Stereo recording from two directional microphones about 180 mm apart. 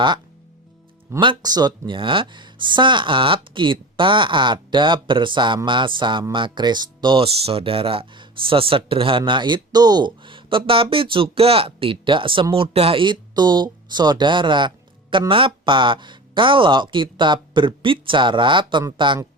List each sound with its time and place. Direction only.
1.1 s speech: 25° right (ahead or behind)